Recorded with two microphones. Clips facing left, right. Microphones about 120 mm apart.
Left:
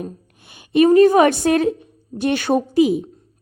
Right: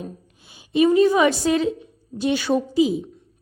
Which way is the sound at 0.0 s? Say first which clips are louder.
Left 4 dB; 60° left (ahead or behind).